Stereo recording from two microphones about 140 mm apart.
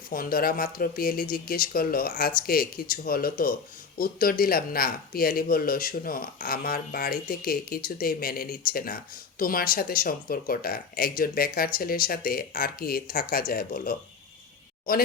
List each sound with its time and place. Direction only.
0.1 s speech: 90° left